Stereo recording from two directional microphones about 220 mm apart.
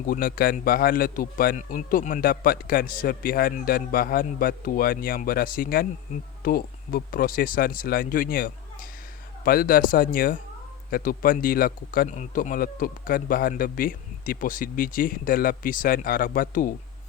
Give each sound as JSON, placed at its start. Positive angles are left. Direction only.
{"t": 0.1, "sound": "a man's voice", "side_deg": 40}